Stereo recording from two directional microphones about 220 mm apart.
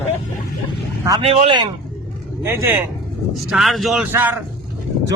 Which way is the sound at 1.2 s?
25° right (ahead or behind).